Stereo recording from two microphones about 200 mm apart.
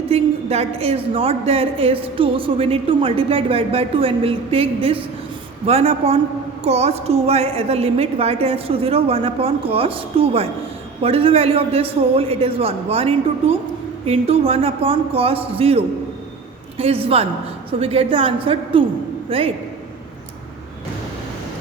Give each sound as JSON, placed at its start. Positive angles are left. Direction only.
{"t": 0.1, "sound": "a woman's voice", "side_deg": -30}